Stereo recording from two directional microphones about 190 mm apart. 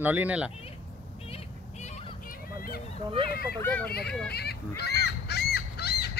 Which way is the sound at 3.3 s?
55° left (ahead or behind).